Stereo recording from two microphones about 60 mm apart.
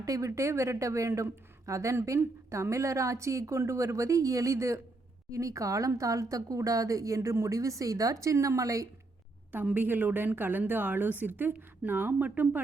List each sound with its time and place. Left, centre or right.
0.0 s speech: right
9.7 s a woman's voice: right